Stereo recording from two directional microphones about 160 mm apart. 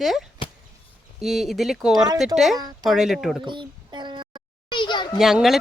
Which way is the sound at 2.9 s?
Centre (ahead or behind).